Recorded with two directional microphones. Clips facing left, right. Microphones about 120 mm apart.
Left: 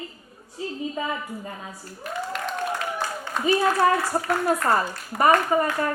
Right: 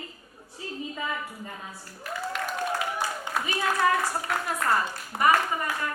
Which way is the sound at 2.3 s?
10° right (ahead or behind).